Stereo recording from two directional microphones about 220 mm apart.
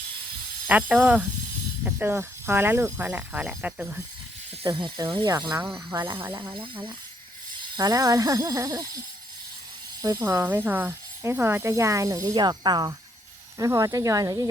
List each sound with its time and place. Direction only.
0.7 s speech: 5° right (ahead or behind)
4.6 s speech: 20° right (ahead or behind)
7.8 s speech: 15° right (ahead or behind)
10.0 s speech: 15° right (ahead or behind)